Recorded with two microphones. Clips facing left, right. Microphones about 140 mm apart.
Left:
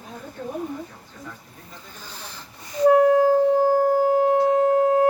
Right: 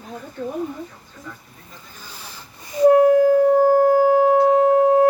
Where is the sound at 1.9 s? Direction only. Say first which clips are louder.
Even; 10° right (ahead or behind).